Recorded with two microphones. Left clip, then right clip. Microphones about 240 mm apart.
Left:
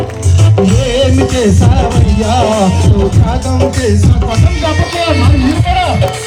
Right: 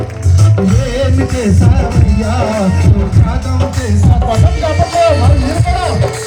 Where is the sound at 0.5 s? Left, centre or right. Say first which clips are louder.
Left 5 dB; right.